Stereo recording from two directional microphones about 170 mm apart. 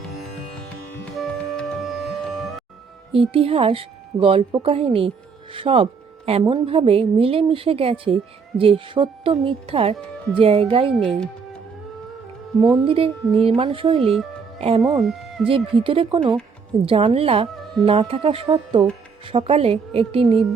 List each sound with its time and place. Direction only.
1.1 s music: centre (ahead or behind)
3.1 s a woman's voice: 35° right (ahead or behind)
10.9 s speech: centre (ahead or behind)
12.5 s a woman's voice: 25° right (ahead or behind)
14.9 s speech: centre (ahead or behind)
15.4 s a woman's voice: 35° right (ahead or behind)